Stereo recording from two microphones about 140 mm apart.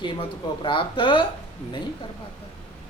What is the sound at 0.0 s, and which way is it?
Speech, 35° left (ahead or behind).